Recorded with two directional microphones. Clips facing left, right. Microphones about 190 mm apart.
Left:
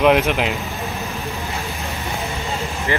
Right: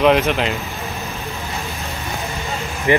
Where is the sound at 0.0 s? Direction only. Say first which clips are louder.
Even; 5° left (ahead or behind).